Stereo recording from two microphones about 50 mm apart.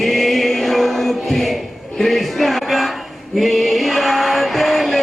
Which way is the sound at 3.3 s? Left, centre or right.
Centre.